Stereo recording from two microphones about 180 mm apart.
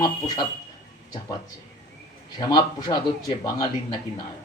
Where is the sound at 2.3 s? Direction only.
20° left (ahead or behind).